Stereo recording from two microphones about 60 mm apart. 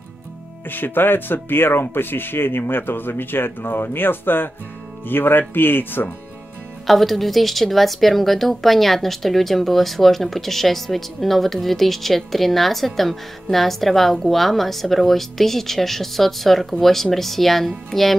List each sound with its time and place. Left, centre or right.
0.7 s speech: left
6.9 s a woman's voice: centre